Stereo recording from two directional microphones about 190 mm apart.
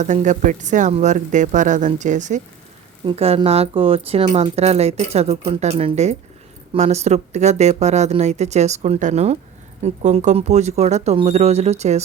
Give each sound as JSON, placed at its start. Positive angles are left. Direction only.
{"t": 0.0, "sound": "speech", "side_deg": -40}
{"t": 3.0, "sound": "speech", "side_deg": -30}